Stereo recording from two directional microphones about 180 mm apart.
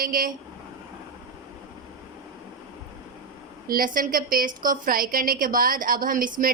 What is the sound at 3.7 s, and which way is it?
A woman's voice, 50° right (ahead or behind).